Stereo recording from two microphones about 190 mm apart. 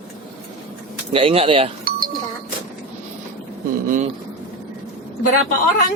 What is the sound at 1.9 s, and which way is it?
Music, 50° right (ahead or behind).